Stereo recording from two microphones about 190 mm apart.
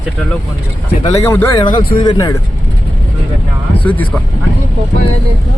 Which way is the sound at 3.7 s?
10° left (ahead or behind).